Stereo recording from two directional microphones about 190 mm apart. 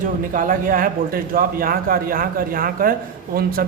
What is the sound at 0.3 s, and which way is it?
A man's voice, 45° right (ahead or behind).